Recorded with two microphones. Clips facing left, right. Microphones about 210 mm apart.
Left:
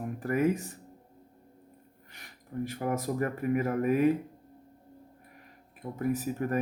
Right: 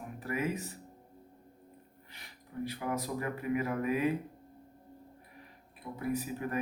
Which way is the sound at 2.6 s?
45° left (ahead or behind).